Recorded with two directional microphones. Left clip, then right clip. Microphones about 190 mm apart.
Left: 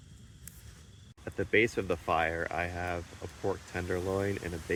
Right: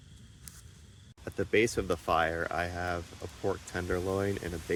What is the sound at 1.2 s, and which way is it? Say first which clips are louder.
Speech: even; 15° right (ahead or behind).